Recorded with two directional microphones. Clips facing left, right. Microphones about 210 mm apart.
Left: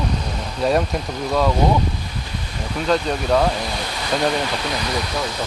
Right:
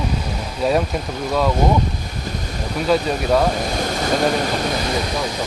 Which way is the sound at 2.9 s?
5° right (ahead or behind).